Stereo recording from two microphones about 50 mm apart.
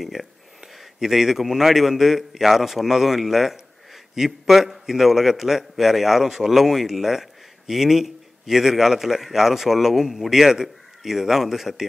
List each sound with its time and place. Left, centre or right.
0.0 s a man's voice: centre